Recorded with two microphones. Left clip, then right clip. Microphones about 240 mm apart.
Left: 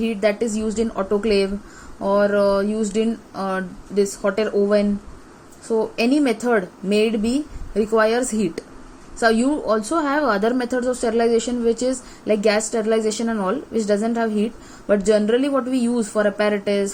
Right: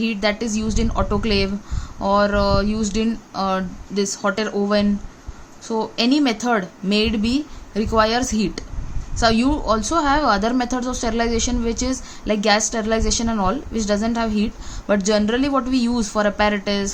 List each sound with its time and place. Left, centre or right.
0.0 s a woman's voice: right